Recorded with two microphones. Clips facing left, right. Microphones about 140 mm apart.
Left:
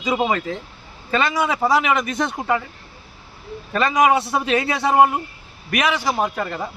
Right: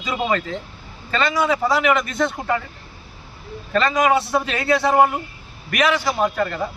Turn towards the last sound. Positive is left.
turn(degrees=15)  # may be behind; listen again after turning